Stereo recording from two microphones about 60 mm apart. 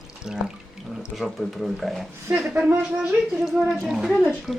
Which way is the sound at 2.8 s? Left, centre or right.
Right.